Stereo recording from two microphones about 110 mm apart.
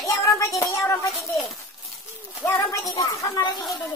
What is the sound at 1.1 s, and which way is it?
Speech, centre (ahead or behind).